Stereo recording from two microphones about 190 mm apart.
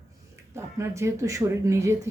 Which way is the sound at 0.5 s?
15° right (ahead or behind).